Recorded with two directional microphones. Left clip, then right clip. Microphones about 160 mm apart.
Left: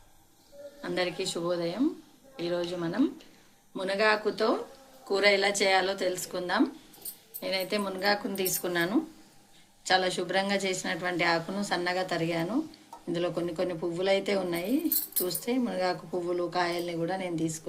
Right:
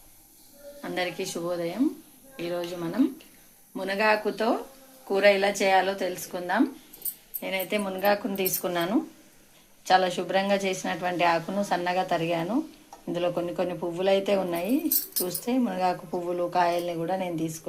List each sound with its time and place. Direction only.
0.8 s speech: 25° right (ahead or behind)
3.8 s a woman's voice: 25° right (ahead or behind)